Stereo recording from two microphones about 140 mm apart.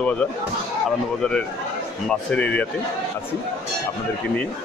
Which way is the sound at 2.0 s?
10° left (ahead or behind).